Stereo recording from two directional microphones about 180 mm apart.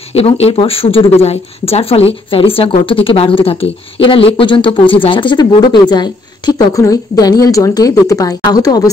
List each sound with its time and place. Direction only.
0.1 s speech: 35° left (ahead or behind)